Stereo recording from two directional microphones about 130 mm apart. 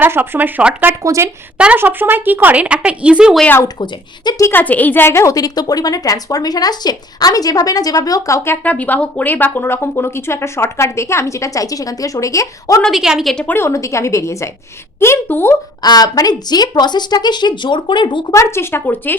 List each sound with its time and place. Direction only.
0.0 s speech: 15° right (ahead or behind)
1.5 s speech: 10° right (ahead or behind)
3.4 s speech: 15° left (ahead or behind)
3.8 s a woman's voice: 30° left (ahead or behind)
8.6 s a woman's voice: 10° left (ahead or behind)
12.8 s a woman's voice: 5° right (ahead or behind)
13.6 s a woman's voice: 25° left (ahead or behind)
15.8 s speech: 30° left (ahead or behind)
18.3 s a woman's voice: 20° left (ahead or behind)